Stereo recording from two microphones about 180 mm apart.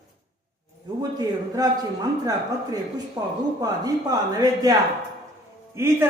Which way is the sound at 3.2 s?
25° right (ahead or behind).